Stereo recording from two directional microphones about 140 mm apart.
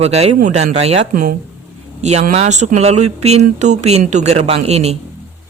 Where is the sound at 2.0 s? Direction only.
50° right (ahead or behind).